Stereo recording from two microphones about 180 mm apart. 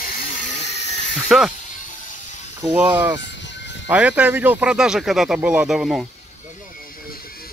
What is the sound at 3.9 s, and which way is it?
Speech, 10° right (ahead or behind).